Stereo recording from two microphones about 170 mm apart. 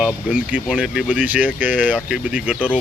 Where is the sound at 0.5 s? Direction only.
5° right (ahead or behind).